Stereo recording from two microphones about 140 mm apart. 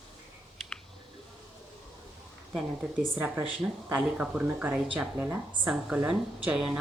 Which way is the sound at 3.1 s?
15° right (ahead or behind).